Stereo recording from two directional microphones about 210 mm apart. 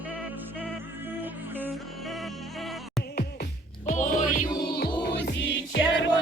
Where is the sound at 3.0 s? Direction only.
50° left (ahead or behind).